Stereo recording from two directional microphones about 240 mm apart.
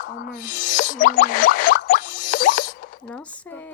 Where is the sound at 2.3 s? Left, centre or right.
Left.